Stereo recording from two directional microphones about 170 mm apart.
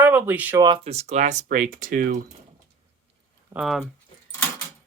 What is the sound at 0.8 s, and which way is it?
Speech, 40° right (ahead or behind).